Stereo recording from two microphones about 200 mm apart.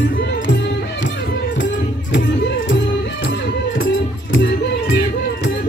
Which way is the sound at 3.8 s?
65° left (ahead or behind).